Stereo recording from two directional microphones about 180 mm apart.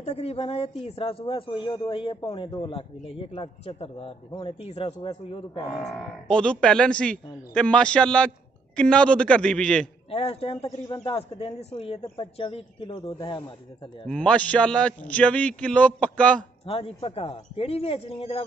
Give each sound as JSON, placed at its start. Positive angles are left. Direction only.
{"t": 0.0, "sound": "speech", "side_deg": 35}
{"t": 5.7, "sound": "speech", "side_deg": 0}
{"t": 10.1, "sound": "speech", "side_deg": 35}
{"t": 14.0, "sound": "a man's voice", "side_deg": 5}
{"t": 16.6, "sound": "speech", "side_deg": 30}